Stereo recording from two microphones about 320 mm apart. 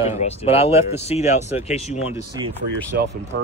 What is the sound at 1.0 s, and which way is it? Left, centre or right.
Speech, centre.